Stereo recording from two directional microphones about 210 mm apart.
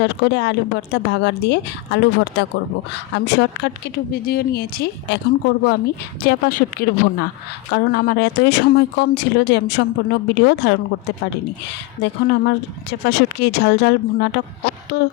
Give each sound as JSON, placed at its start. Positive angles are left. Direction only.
{"t": 0.0, "sound": "a woman's voice", "side_deg": 55}
{"t": 6.2, "sound": "speech", "side_deg": 45}
{"t": 12.0, "sound": "speech", "side_deg": 50}